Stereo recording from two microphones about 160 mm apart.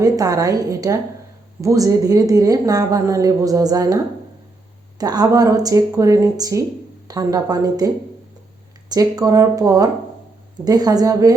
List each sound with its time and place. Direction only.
0.0 s a woman's voice: 20° right (ahead or behind)